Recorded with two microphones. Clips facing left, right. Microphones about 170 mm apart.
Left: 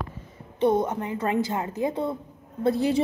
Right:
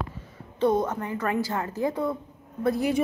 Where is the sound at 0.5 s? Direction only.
20° left (ahead or behind).